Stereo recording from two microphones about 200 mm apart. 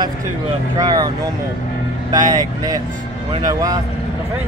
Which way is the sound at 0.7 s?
20° right (ahead or behind).